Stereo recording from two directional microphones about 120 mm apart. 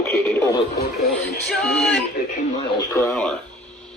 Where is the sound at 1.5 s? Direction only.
5° left (ahead or behind).